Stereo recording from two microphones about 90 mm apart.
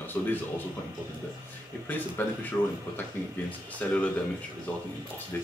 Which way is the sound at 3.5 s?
15° left (ahead or behind).